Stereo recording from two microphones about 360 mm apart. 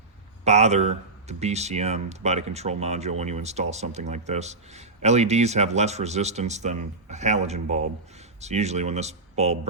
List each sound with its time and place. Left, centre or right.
0.4 s speech: centre